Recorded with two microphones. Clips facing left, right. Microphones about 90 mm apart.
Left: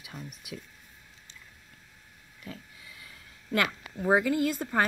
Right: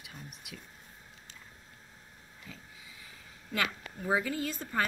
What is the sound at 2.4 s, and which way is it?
Pig, 70° left (ahead or behind).